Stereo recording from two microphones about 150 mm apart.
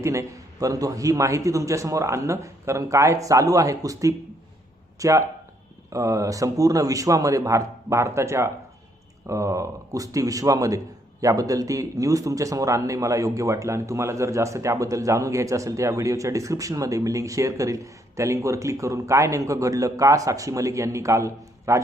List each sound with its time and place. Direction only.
0.0 s a man's voice: 20° right (ahead or behind)